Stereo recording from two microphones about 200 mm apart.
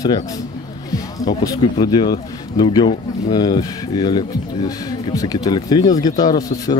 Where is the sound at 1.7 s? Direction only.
20° left (ahead or behind).